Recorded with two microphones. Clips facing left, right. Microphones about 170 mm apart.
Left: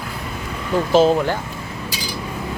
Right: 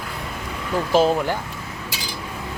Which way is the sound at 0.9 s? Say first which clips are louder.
Left 3 dB; 10° right (ahead or behind).